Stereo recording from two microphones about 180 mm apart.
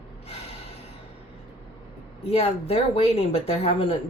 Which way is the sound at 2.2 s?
35° left (ahead or behind).